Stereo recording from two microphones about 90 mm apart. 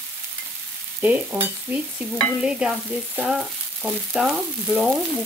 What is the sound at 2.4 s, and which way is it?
Frying, 10° right (ahead or behind).